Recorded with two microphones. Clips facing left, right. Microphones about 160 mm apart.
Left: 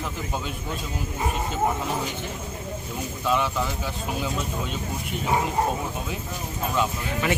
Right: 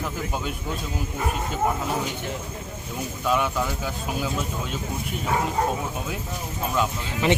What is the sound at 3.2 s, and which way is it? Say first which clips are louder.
Speech: right 1 dB; 5° right (ahead or behind).